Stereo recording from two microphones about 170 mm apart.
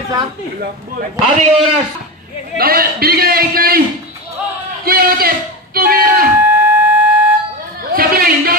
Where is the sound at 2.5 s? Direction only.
60° right (ahead or behind).